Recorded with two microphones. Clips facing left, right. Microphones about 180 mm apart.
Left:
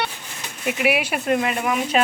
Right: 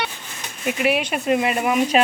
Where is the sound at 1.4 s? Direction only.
10° right (ahead or behind).